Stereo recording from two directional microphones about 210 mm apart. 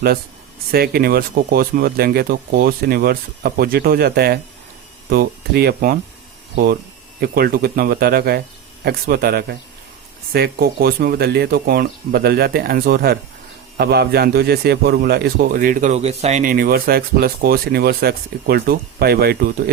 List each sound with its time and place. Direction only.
0.7 s a man's voice: 45° right (ahead or behind)
7.2 s a man's voice: 45° right (ahead or behind)